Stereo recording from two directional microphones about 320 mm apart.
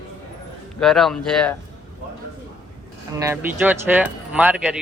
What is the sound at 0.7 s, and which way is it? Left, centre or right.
Speech, centre.